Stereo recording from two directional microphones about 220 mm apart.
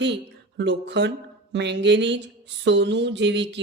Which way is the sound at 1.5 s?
50° right (ahead or behind).